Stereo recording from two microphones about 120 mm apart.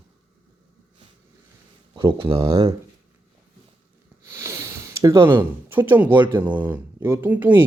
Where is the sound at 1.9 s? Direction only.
45° right (ahead or behind).